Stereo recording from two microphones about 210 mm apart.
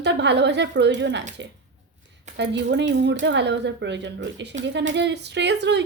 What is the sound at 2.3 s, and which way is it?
Speech, 55° right (ahead or behind).